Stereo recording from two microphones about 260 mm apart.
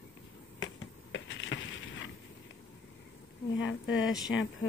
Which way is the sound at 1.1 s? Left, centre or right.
Left.